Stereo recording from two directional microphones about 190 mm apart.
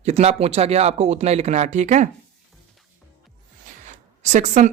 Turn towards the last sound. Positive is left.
turn(degrees=-40)  # may be behind; listen again after turning